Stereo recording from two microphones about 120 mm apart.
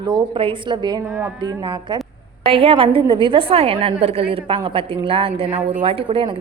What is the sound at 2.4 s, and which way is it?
A woman's voice, 50° right (ahead or behind).